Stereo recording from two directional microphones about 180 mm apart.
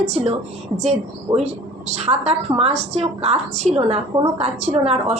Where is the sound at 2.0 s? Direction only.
35° right (ahead or behind).